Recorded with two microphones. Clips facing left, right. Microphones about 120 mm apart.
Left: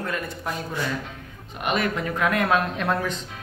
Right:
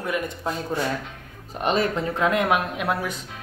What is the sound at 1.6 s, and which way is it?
Speech, 30° right (ahead or behind).